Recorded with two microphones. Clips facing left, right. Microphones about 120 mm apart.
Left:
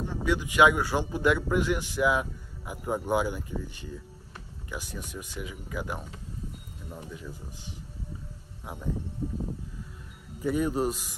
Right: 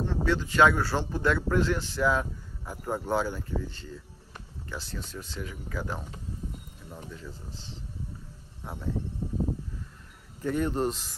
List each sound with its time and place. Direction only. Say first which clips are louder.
0.0 s speech: right 1 dB; 10° left (ahead or behind)
8.9 s a sound: right 1 dB; 15° right (ahead or behind)
10.4 s speech: left 1 dB; 10° left (ahead or behind)